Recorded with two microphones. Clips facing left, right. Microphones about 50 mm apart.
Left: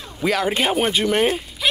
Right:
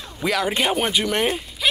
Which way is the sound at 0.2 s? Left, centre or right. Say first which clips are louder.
Left 1 dB; centre.